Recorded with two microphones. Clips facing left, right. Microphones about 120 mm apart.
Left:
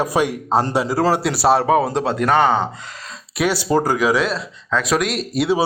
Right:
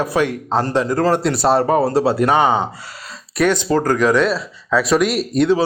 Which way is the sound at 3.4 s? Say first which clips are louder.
Right 2 dB; 5° left (ahead or behind).